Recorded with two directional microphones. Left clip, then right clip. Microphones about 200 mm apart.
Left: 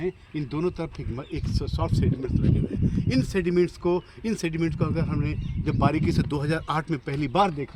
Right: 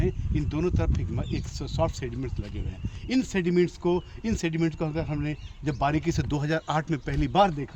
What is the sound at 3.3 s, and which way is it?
Speech, 40° right (ahead or behind).